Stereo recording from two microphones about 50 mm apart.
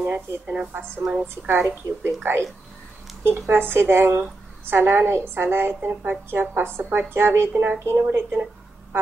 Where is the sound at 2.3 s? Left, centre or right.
Right.